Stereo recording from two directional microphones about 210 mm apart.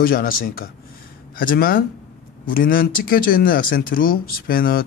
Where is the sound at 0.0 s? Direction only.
45° left (ahead or behind).